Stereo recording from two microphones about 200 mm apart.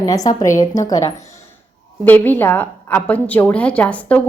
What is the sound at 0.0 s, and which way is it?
A woman's voice, 20° left (ahead or behind).